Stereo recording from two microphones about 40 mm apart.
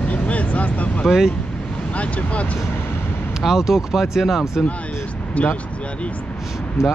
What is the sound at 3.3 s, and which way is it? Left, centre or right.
Speech, centre.